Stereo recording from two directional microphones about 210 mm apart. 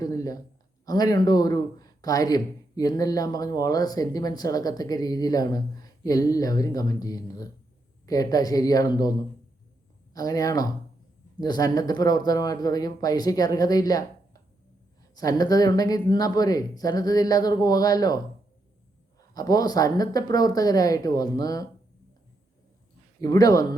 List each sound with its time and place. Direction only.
0.0 s speech: 15° left (ahead or behind)
10.2 s speech: 15° left (ahead or behind)
15.1 s speech: 15° left (ahead or behind)
19.3 s speech: 20° left (ahead or behind)
23.2 s speech: 15° left (ahead or behind)